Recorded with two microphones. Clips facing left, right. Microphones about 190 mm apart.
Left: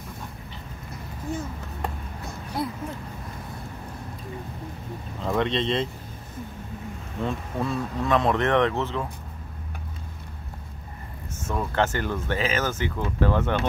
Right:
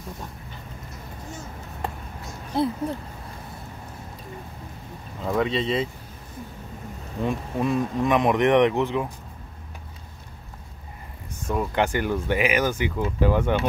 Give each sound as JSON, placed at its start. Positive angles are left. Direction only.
{"t": 2.5, "sound": "speech", "side_deg": -25}
{"t": 5.2, "sound": "speech", "side_deg": -5}
{"t": 7.2, "sound": "speech", "side_deg": -15}
{"t": 11.4, "sound": "speech", "side_deg": -15}